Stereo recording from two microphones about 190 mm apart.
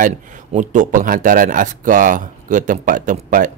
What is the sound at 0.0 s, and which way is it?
Speech, 40° right (ahead or behind).